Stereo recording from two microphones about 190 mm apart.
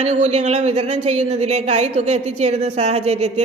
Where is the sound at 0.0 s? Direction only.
35° right (ahead or behind).